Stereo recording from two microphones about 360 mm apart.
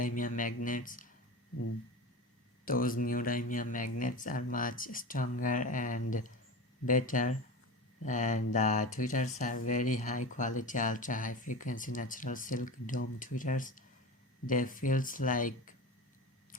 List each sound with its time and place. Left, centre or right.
0.0 s speech: left
2.6 s speech: left